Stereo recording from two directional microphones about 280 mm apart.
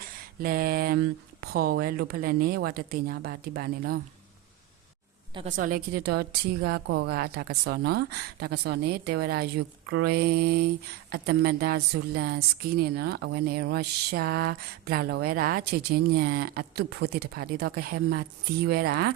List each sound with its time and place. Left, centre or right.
0.4 s a woman's voice: right
5.3 s a woman's voice: right